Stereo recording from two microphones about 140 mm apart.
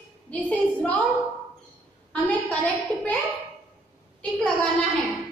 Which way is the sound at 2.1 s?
10° left (ahead or behind).